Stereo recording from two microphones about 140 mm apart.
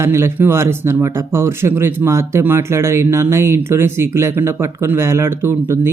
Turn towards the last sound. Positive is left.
turn(degrees=-20)  # may be behind; listen again after turning